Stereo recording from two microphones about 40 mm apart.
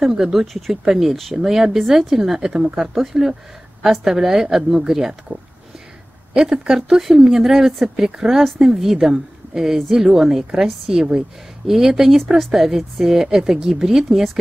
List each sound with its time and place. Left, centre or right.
0.0 s speech: centre
6.3 s speech: centre